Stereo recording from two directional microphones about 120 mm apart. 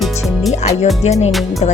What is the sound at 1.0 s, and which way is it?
Speech, 65° left (ahead or behind).